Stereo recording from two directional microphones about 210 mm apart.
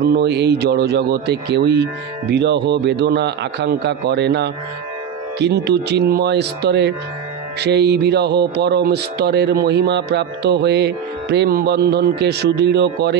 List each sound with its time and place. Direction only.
0.0 s speech: 50° right (ahead or behind)